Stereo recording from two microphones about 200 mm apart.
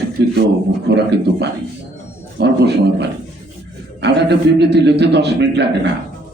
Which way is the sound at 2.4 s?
60° right (ahead or behind).